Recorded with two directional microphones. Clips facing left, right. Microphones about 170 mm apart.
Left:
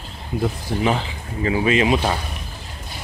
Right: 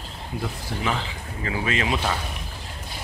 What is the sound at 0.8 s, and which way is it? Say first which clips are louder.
Speech: left 6 dB; 25° left (ahead or behind).